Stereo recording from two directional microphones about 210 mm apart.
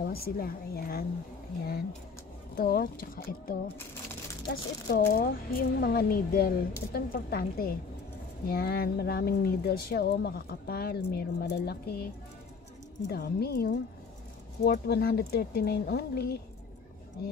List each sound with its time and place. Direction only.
0.0 s speech: 45° left (ahead or behind)
2.5 s speech: 45° left (ahead or behind)
4.5 s speech: 55° left (ahead or behind)